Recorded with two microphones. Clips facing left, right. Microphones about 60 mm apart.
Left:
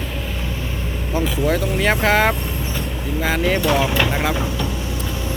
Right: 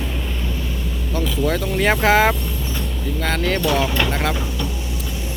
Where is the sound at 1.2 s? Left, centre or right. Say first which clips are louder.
Left 2 dB; centre.